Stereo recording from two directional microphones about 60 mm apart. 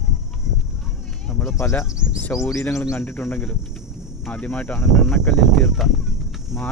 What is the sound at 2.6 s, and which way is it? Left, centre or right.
Speech, left.